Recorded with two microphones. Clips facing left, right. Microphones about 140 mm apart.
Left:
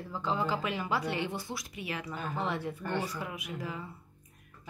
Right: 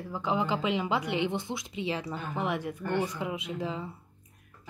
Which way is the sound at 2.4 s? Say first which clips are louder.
Right 3 dB; 15° right (ahead or behind).